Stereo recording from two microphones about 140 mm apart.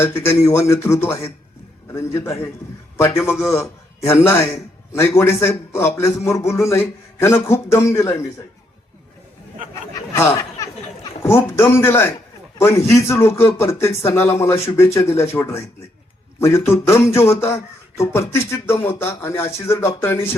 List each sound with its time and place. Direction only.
0.0 s a man's voice: 20° left (ahead or behind)
11.2 s a man's voice: 15° left (ahead or behind)